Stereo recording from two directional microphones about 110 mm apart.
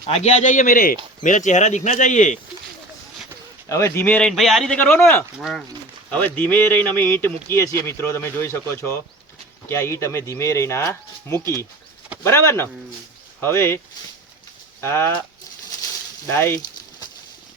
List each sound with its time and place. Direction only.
0.1 s speech: 90° left
1.5 s speech: 90° left
3.7 s a man's voice: 25° left (ahead or behind)
4.3 s speech: centre (ahead or behind)
4.8 s speech: 20° left (ahead or behind)
5.4 s speech: centre (ahead or behind)
6.1 s a man's voice: 15° left (ahead or behind)
14.8 s a man's voice: 20° left (ahead or behind)
16.2 s a man's voice: 20° left (ahead or behind)